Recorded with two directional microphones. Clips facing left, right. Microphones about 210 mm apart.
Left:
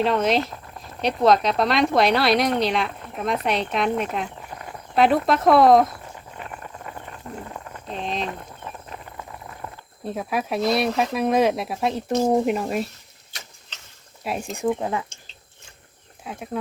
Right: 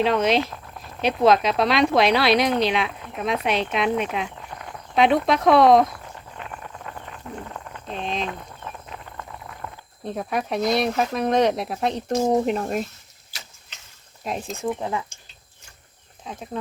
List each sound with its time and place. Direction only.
0.0 s a sound: centre (ahead or behind)
10.1 s speech: 5° left (ahead or behind)
14.3 s speech: 10° left (ahead or behind)
16.2 s speech: 10° left (ahead or behind)